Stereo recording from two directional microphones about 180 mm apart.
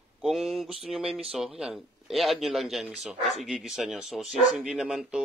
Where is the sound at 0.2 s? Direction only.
Centre (ahead or behind).